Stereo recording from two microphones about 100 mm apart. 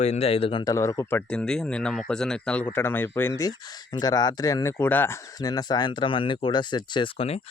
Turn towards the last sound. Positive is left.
turn(degrees=80)